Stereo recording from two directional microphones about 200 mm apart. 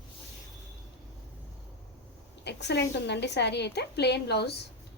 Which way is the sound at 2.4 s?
60° left (ahead or behind).